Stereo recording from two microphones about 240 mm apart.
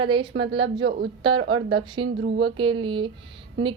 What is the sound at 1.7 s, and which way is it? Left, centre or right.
Speech, right.